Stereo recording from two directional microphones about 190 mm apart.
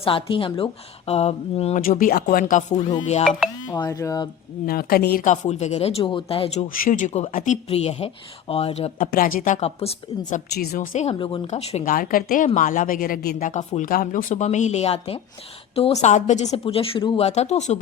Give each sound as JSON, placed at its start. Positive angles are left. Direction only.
{"t": 0.0, "sound": "speech", "side_deg": 30}
{"t": 1.9, "sound": "speech", "side_deg": 45}
{"t": 3.7, "sound": "speech", "side_deg": 20}
{"t": 4.6, "sound": "speech", "side_deg": 50}
{"t": 6.7, "sound": "speech", "side_deg": 45}
{"t": 9.0, "sound": "speech", "side_deg": 45}
{"t": 10.5, "sound": "a woman's voice", "side_deg": 55}
{"t": 10.9, "sound": "speech", "side_deg": 30}
{"t": 11.4, "sound": "speech", "side_deg": 35}